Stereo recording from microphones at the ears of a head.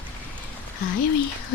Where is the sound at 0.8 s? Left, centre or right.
Left.